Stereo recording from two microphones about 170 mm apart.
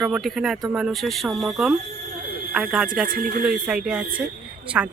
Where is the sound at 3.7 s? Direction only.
5° right (ahead or behind).